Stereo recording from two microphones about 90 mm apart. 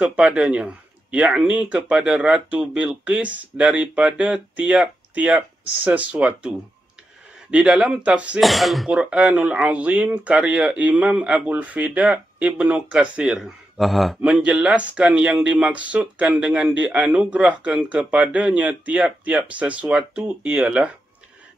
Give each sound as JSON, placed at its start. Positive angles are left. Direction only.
{"t": 0.0, "sound": "speech", "side_deg": -15}
{"t": 7.5, "sound": "speech", "side_deg": -15}
{"t": 8.4, "sound": "speech", "side_deg": 0}